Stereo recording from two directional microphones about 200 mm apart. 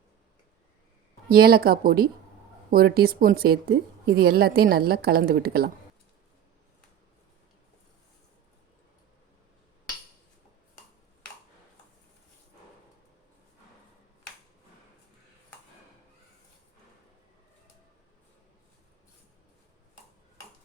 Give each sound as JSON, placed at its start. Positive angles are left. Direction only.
{"t": 1.3, "sound": "a woman's voice", "side_deg": -50}